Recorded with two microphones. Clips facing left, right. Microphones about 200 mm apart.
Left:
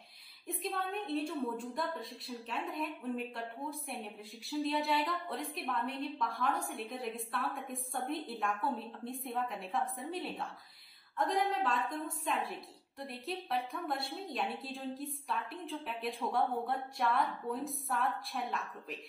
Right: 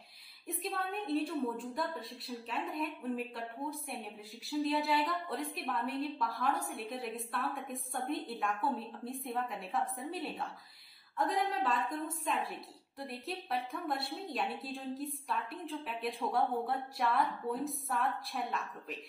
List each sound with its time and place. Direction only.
0.5 s a woman's voice: centre (ahead or behind)